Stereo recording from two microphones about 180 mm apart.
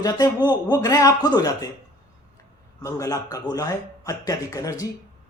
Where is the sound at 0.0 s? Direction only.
20° left (ahead or behind).